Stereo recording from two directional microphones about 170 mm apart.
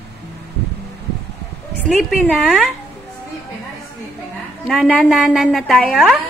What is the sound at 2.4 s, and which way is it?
Speech, centre (ahead or behind).